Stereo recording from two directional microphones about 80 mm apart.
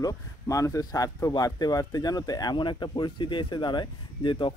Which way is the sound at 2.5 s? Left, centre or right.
Left.